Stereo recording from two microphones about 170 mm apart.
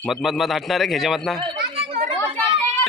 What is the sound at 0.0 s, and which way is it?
A man's voice, centre (ahead or behind).